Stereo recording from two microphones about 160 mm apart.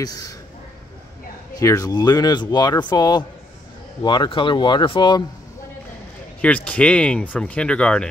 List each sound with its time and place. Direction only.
0.0 s speech: 20° left (ahead or behind)
1.5 s speech: 20° left (ahead or behind)
6.4 s speech: 10° left (ahead or behind)